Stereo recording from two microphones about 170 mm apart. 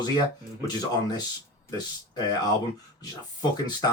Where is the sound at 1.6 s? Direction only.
25° left (ahead or behind).